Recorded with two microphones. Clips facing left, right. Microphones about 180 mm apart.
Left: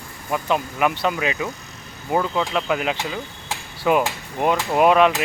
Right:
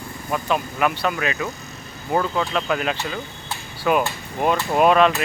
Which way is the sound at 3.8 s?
20° left (ahead or behind).